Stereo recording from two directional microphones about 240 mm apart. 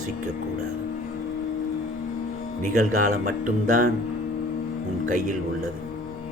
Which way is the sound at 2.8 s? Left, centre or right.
Right.